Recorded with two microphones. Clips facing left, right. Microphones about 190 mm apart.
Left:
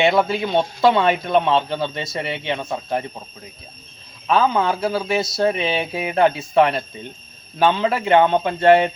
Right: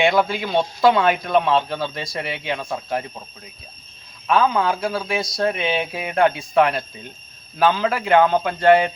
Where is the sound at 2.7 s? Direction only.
Centre (ahead or behind).